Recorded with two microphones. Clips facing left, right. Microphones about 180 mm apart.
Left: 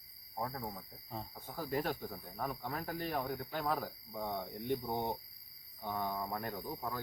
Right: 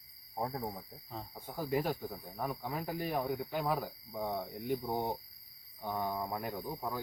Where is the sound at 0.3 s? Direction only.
25° right (ahead or behind).